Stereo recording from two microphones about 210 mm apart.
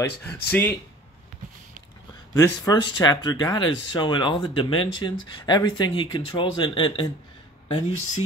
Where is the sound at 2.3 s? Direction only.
15° left (ahead or behind).